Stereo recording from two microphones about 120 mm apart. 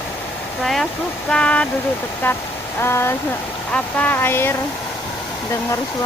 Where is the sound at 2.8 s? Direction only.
20° left (ahead or behind).